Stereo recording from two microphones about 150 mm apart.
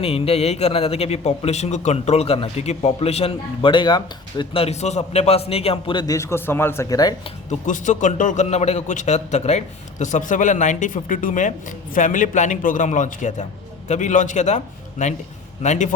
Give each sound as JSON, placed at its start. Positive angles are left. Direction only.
{"t": 0.0, "sound": "a man's voice", "side_deg": 40}
{"t": 7.7, "sound": "a man's voice", "side_deg": 55}